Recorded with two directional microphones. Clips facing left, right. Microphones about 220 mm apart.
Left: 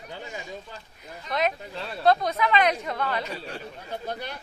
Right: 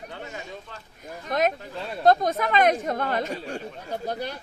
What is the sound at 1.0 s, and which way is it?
Speech, 45° right (ahead or behind).